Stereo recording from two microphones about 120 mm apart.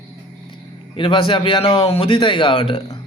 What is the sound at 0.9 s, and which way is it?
A man's voice, 45° left (ahead or behind).